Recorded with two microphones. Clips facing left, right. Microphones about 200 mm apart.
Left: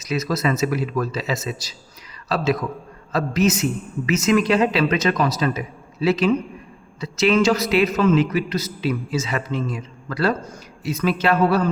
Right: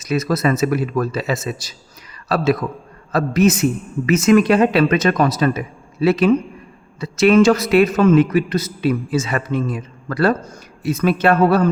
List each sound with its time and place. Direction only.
0.0 s a man's voice: 55° right (ahead or behind)